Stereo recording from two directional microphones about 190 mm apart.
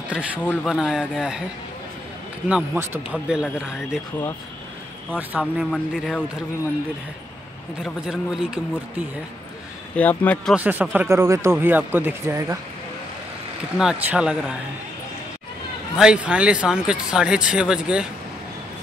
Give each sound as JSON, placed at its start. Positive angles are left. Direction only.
{"t": 0.1, "sound": "speech", "side_deg": -5}
{"t": 2.4, "sound": "speech", "side_deg": -5}
{"t": 5.4, "sound": "speech", "side_deg": 5}
{"t": 7.8, "sound": "speech", "side_deg": 0}
{"t": 9.9, "sound": "speech", "side_deg": 10}
{"t": 10.5, "sound": "speech", "side_deg": -10}
{"t": 13.7, "sound": "speech", "side_deg": -5}
{"t": 16.0, "sound": "speech", "side_deg": -5}